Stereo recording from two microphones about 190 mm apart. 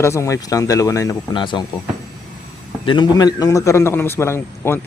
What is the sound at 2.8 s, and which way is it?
A man's voice, 25° left (ahead or behind).